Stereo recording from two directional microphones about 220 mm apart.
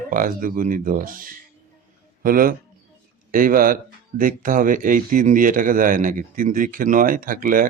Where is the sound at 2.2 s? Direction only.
40° right (ahead or behind).